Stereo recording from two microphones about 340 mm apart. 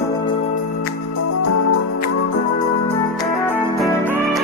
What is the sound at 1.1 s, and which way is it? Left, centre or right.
Music, left.